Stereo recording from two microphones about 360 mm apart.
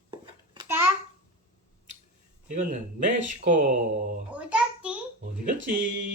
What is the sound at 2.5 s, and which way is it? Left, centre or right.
Speech, right.